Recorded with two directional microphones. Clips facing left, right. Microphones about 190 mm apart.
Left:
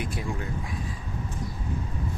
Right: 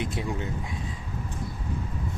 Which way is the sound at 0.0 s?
25° right (ahead or behind).